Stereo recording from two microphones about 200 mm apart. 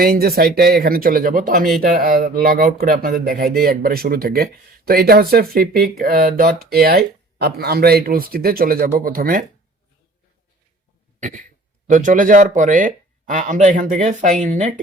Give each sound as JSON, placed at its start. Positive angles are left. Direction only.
{"t": 0.0, "sound": "speech", "side_deg": -50}
{"t": 11.2, "sound": "throat clearing", "side_deg": -40}
{"t": 11.9, "sound": "speech", "side_deg": -40}